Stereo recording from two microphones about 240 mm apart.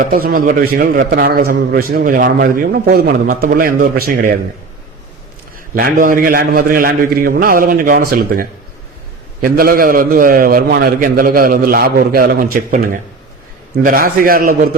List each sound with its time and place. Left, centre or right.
0.0 s a man's voice: right
5.7 s a man's voice: right
9.4 s a man's voice: right